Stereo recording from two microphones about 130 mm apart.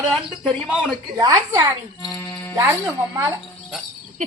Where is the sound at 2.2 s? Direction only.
10° left (ahead or behind).